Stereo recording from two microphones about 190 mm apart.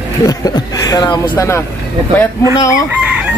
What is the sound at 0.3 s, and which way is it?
Speech, 20° left (ahead or behind).